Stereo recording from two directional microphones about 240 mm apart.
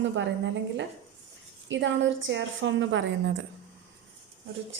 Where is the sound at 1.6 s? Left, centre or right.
Right.